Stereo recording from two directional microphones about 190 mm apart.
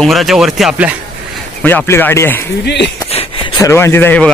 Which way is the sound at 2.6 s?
65° left (ahead or behind).